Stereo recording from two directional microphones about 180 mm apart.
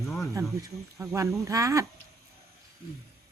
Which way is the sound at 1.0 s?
15° right (ahead or behind).